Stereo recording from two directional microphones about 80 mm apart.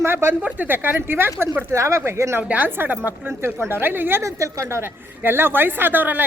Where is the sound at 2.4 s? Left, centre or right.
Centre.